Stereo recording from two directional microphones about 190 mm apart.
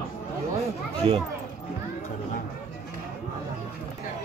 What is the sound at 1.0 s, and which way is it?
Speech, 30° right (ahead or behind).